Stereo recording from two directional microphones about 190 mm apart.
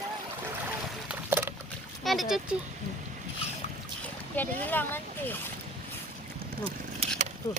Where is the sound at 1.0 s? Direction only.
10° right (ahead or behind).